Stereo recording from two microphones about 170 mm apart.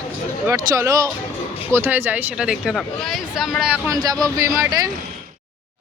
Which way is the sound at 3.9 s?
20° right (ahead or behind).